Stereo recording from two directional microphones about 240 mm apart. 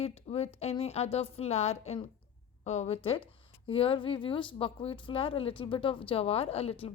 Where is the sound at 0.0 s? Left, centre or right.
Left.